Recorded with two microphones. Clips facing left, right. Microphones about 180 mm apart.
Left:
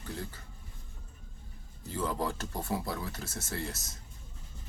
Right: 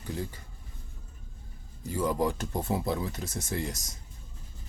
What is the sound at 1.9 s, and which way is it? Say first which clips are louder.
Speech: right 5 dB; 15° right (ahead or behind).